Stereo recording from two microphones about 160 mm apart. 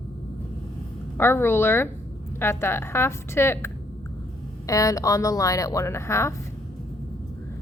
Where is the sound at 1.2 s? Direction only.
15° left (ahead or behind).